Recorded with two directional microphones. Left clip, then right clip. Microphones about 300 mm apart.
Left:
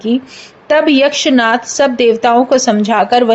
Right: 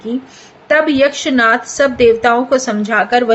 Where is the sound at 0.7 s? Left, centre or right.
Centre.